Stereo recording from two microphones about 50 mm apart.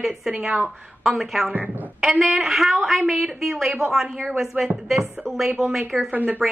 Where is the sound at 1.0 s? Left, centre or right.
Centre.